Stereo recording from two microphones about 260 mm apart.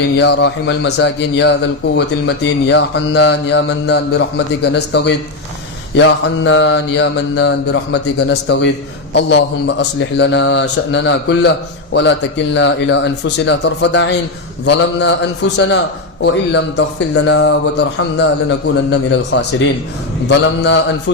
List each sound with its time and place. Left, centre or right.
0.2 s a man's voice: left
12.5 s speech: left